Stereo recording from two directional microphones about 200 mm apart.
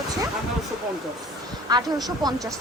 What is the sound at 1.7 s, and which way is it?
Speech, 20° right (ahead or behind).